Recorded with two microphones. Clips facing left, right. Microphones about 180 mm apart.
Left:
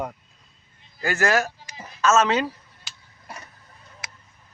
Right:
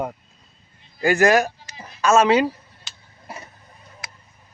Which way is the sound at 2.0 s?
10° right (ahead or behind).